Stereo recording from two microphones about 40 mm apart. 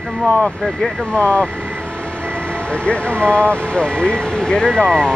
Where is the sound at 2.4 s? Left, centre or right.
Left.